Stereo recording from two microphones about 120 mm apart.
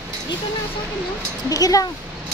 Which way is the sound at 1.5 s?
30° left (ahead or behind).